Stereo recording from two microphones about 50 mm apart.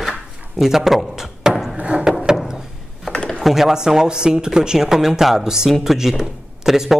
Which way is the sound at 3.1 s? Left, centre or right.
Centre.